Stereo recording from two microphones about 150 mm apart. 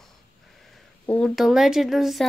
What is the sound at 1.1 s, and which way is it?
Speech, 5° left (ahead or behind).